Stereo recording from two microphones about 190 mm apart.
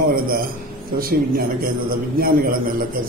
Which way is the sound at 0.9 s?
50° right (ahead or behind).